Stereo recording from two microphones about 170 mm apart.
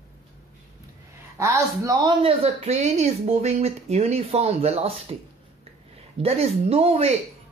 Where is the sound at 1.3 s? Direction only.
15° right (ahead or behind); by 5.1 s 35° right (ahead or behind).